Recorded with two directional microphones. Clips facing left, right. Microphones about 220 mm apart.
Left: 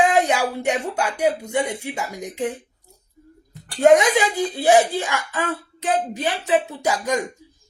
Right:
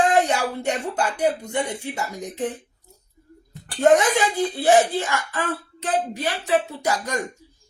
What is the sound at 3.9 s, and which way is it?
Speech, 10° left (ahead or behind).